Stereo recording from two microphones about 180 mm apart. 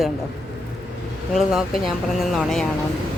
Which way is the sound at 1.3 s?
5° right (ahead or behind).